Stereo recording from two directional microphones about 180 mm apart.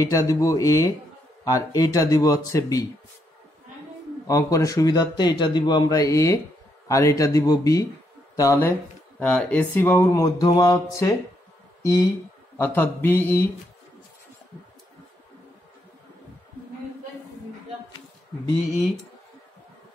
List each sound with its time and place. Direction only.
0.0 s speech: 20° left (ahead or behind)
4.3 s speech: 15° left (ahead or behind)